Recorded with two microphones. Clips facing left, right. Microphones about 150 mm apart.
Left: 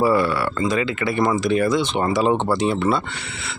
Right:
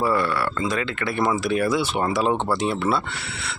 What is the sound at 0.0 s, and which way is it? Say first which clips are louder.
A man's voice: left 4 dB; 5° left (ahead or behind).